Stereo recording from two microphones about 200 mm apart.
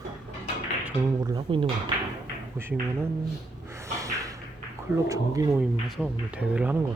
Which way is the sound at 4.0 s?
15° right (ahead or behind).